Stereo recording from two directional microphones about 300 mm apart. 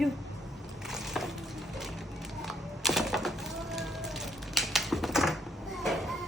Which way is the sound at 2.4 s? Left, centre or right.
Centre.